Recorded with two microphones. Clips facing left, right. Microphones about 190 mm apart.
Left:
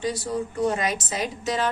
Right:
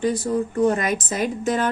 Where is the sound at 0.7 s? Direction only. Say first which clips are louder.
Right 3 dB; 55° right (ahead or behind).